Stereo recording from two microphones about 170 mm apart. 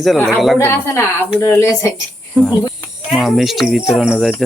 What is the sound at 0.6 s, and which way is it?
Speech, 15° left (ahead or behind).